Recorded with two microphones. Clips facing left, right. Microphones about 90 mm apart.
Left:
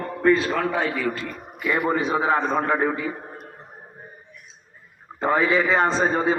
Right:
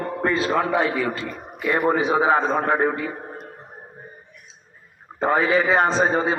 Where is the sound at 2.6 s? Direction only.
5° right (ahead or behind).